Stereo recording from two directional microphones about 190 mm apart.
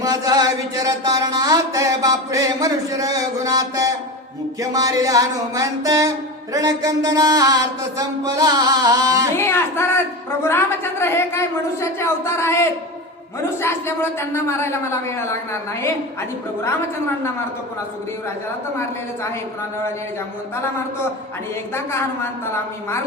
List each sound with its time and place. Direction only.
0.0 s a sound: 20° right (ahead or behind)
4.6 s music: 20° right (ahead or behind)
9.3 s a woman's voice: 15° left (ahead or behind)
21.9 s a woman's voice: 15° left (ahead or behind)